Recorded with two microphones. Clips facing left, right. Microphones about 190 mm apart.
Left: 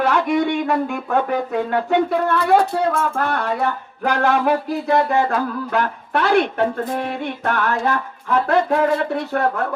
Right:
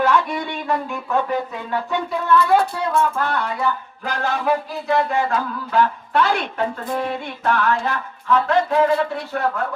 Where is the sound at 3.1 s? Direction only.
55° left (ahead or behind).